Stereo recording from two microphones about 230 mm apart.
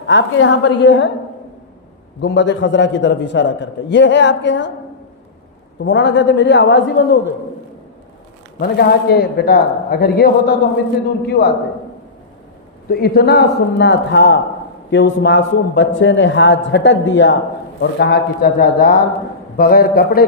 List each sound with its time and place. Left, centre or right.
0.1 s a man's voice: left
2.2 s a man's voice: left
5.8 s a man's voice: left
8.6 s a man's voice: left
12.9 s a man's voice: left